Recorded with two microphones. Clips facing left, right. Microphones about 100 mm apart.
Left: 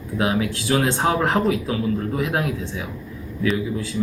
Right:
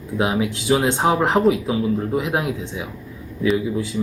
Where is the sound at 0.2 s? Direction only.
20° right (ahead or behind).